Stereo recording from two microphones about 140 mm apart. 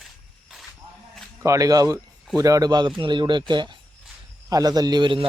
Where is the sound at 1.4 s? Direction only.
20° right (ahead or behind).